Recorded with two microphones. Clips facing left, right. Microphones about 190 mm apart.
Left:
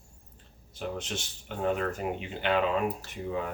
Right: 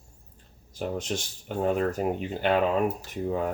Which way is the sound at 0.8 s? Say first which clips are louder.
Right 5 dB; 40° right (ahead or behind).